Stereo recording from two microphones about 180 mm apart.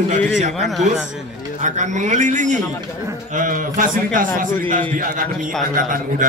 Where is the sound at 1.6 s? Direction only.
45° right (ahead or behind).